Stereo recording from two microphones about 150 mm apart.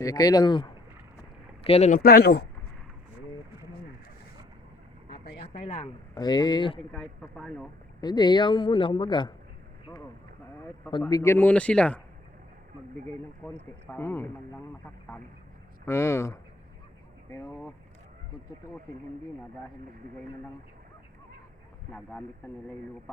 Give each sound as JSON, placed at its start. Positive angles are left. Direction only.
{"t": 0.0, "sound": "speech", "side_deg": 25}
{"t": 1.6, "sound": "speech", "side_deg": 45}
{"t": 1.9, "sound": "speech", "side_deg": 90}
{"t": 5.6, "sound": "speech", "side_deg": 45}
{"t": 6.1, "sound": "speech", "side_deg": 25}
{"t": 6.9, "sound": "speech", "side_deg": 5}
{"t": 8.0, "sound": "a man's voice", "side_deg": 30}
{"t": 11.0, "sound": "speech", "side_deg": 20}
{"t": 13.4, "sound": "speech", "side_deg": 10}
{"t": 15.9, "sound": "speech", "side_deg": 20}